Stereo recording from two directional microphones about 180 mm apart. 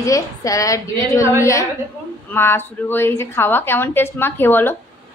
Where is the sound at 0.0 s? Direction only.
20° left (ahead or behind).